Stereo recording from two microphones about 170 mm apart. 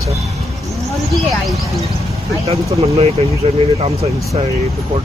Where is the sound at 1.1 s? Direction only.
Centre (ahead or behind).